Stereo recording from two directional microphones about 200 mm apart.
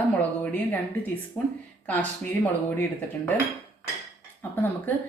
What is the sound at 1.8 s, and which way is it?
Speech, 10° left (ahead or behind).